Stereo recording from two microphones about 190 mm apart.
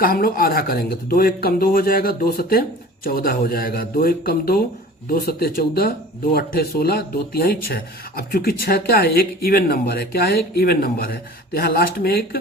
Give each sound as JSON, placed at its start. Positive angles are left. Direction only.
{"t": 0.0, "sound": "speech", "side_deg": 50}